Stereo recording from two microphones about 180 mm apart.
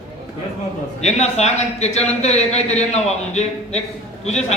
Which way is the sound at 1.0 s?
40° left (ahead or behind).